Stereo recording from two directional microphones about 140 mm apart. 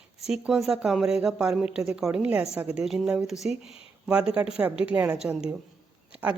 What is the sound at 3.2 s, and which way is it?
Speech, 50° left (ahead or behind).